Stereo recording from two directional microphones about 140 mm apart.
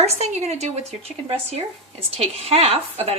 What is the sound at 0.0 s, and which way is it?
Speech, 50° right (ahead or behind).